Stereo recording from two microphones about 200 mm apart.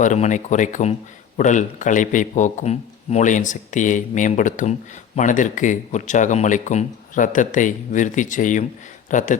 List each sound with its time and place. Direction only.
0.0 s speech: 40° left (ahead or behind)